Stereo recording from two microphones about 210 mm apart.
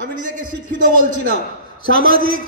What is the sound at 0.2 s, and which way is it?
Speech, 40° right (ahead or behind).